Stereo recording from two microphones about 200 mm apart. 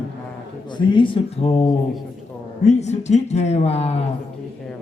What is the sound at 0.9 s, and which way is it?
Speech, 25° left (ahead or behind).